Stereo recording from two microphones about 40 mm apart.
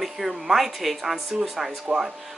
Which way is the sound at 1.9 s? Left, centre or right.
Right.